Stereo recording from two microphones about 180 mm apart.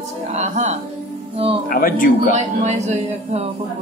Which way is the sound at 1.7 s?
50° left (ahead or behind).